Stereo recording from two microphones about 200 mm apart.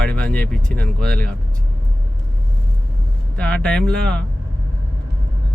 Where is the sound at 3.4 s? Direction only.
5° left (ahead or behind).